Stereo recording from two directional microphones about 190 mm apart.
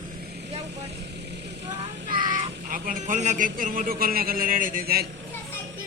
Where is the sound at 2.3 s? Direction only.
45° right (ahead or behind).